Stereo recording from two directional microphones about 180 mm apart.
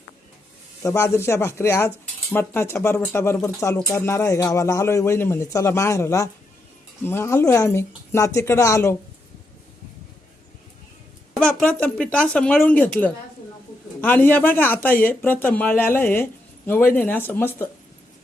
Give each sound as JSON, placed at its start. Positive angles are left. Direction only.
{"t": 0.8, "sound": "speech", "side_deg": 15}
{"t": 11.3, "sound": "speech", "side_deg": 5}